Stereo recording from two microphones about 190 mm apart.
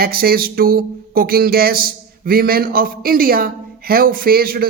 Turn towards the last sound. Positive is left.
turn(degrees=-50)  # may be behind; listen again after turning